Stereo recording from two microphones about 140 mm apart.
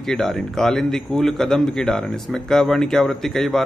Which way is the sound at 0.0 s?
5° left (ahead or behind).